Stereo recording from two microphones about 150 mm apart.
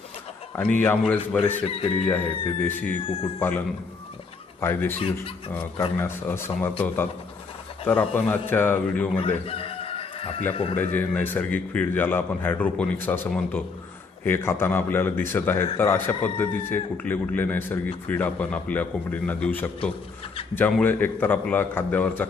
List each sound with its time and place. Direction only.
0.5 s a man's voice: 10° left (ahead or behind)
1.6 s speech: 40° left (ahead or behind)
2.0 s a man's voice: 10° left (ahead or behind)
4.6 s a man's voice: 15° left (ahead or behind)
4.9 s speech: 40° left (ahead or behind)
6.0 s a man's voice: 15° left (ahead or behind)
9.1 s chicken: 40° left (ahead or behind)
10.5 s speech: 40° left (ahead or behind)
10.8 s a man's voice: 10° left (ahead or behind)